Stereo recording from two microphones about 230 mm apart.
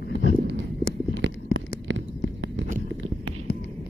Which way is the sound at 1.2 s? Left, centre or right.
Right.